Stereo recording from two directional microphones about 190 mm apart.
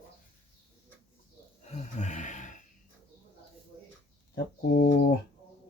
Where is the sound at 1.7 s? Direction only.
40° left (ahead or behind).